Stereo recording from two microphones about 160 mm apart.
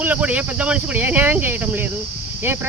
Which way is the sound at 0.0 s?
10° right (ahead or behind).